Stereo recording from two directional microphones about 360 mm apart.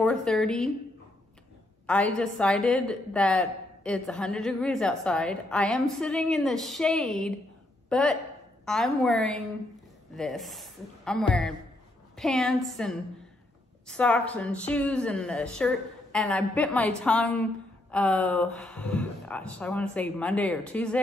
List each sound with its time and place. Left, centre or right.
0.0 s a woman's voice: centre
1.9 s a woman's voice: centre